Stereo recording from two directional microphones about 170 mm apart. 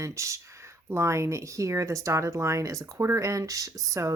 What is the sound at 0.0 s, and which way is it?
Speech, 15° right (ahead or behind).